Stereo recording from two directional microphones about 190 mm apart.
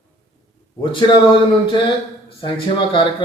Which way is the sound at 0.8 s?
25° left (ahead or behind).